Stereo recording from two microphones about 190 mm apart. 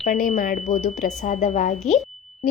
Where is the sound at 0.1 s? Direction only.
45° left (ahead or behind).